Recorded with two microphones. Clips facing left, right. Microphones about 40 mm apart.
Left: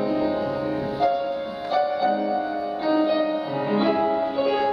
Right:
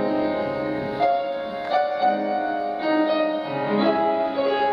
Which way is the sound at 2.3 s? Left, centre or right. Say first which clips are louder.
Right 1 dB; right.